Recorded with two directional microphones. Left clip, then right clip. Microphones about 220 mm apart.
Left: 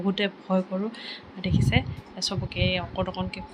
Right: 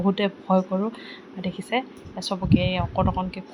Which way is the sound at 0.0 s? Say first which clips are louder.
Right 3 dB; 10° right (ahead or behind).